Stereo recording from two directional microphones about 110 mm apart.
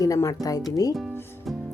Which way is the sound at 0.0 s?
30° left (ahead or behind).